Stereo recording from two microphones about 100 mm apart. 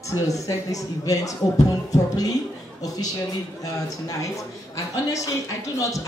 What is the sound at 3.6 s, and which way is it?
Speech, 35° left (ahead or behind).